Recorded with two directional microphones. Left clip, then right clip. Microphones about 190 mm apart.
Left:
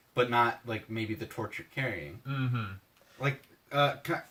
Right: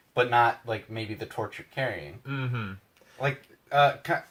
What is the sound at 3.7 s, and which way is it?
Speech, 15° left (ahead or behind).